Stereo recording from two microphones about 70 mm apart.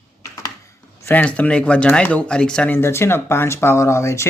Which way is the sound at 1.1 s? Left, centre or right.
Centre.